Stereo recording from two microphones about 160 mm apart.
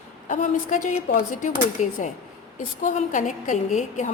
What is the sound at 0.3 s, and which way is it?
A woman's voice, 55° left (ahead or behind).